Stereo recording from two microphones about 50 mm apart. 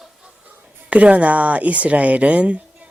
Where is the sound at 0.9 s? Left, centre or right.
Right.